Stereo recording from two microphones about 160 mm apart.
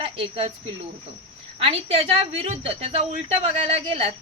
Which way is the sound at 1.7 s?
40° right (ahead or behind).